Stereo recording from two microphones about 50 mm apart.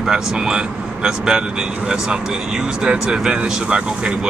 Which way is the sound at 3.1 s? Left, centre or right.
Centre.